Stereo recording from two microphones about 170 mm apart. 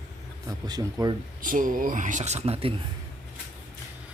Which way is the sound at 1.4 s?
50° right (ahead or behind).